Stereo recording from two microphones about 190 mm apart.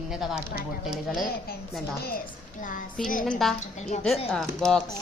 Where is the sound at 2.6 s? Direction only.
40° left (ahead or behind).